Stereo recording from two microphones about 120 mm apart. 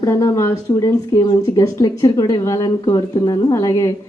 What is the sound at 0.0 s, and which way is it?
Speech, 25° left (ahead or behind).